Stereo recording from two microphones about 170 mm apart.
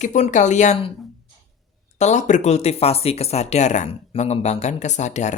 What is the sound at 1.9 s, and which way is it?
Speech, 45° left (ahead or behind).